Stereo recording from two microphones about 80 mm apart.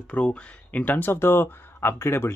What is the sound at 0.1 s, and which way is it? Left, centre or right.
Speech, centre.